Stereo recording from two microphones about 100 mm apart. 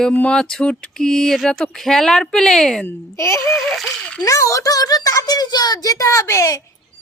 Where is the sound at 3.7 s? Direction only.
Centre (ahead or behind).